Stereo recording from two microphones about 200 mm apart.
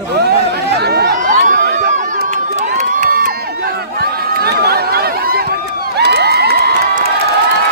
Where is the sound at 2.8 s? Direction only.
40° right (ahead or behind).